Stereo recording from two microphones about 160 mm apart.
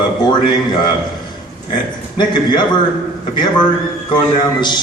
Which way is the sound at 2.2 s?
30° left (ahead or behind).